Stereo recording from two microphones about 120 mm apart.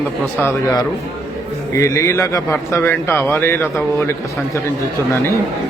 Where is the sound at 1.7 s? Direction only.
25° left (ahead or behind).